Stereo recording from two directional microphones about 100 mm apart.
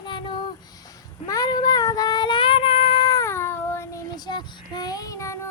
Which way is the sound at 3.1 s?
30° left (ahead or behind).